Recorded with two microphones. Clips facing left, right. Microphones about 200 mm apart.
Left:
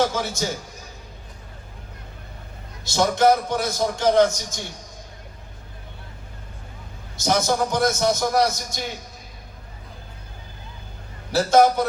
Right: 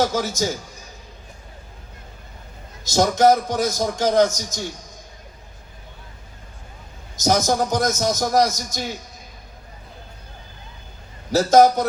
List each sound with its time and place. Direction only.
0.0 s a man's voice: 40° right (ahead or behind)
2.8 s a man's voice: 40° right (ahead or behind)
7.2 s a man's voice: 40° right (ahead or behind)
11.3 s a man's voice: 40° right (ahead or behind)